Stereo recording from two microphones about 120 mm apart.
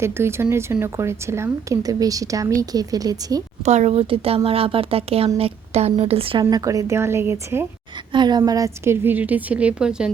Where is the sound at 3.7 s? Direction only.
70° right (ahead or behind); by 6.4 s 50° right (ahead or behind).